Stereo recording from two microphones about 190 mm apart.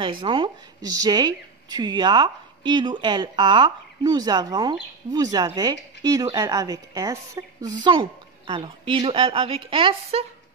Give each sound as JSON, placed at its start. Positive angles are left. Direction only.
{"t": 0.0, "sound": "speech", "side_deg": -25}